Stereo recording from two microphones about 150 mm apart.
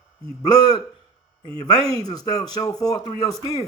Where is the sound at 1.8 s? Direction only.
25° left (ahead or behind).